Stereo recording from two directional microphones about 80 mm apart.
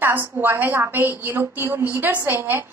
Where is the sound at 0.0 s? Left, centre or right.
Right.